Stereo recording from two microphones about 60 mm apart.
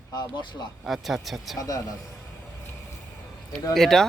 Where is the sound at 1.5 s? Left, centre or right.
Left.